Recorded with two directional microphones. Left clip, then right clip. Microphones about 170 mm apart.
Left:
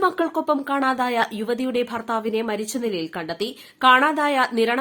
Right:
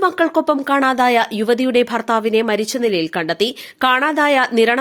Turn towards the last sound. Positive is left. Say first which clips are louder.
# right 6 dB
turn(degrees=-30)  # may be behind; listen again after turning